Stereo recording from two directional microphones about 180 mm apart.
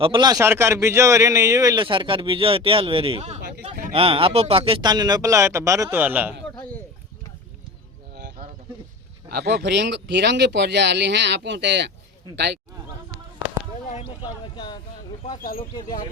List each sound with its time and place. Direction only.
0.0 s a man's voice: 25° right (ahead or behind); by 6.3 s 10° right (ahead or behind)
9.3 s speech: 60° right (ahead or behind)
13.9 s speech: 30° left (ahead or behind)